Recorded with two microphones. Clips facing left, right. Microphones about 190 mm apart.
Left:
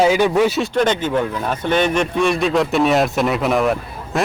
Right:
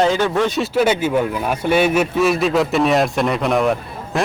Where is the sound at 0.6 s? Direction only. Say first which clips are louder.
Right 1 dB; 5° right (ahead or behind).